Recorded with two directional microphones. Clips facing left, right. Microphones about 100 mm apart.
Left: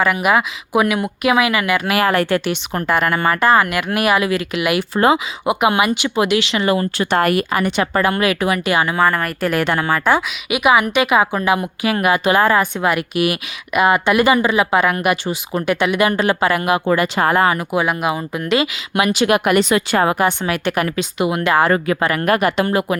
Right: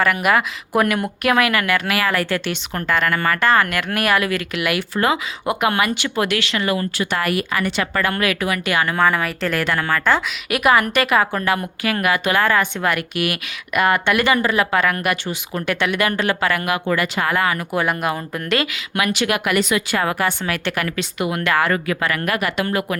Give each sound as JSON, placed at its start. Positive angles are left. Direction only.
{"t": 0.0, "sound": "a woman's voice", "side_deg": 5}
{"t": 2.0, "sound": "a woman's voice", "side_deg": 25}
{"t": 8.9, "sound": "a woman's voice", "side_deg": 5}
{"t": 9.5, "sound": "a woman's voice", "side_deg": 20}
{"t": 17.7, "sound": "a woman's voice", "side_deg": 10}
{"t": 18.6, "sound": "speech", "side_deg": 25}